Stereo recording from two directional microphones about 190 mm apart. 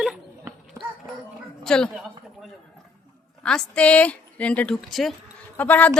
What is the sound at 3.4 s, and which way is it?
A woman's voice, 5° left (ahead or behind).